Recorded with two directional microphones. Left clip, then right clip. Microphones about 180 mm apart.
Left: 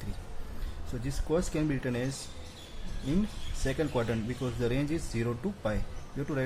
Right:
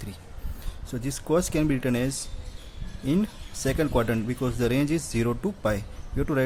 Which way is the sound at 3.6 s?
55° right (ahead or behind).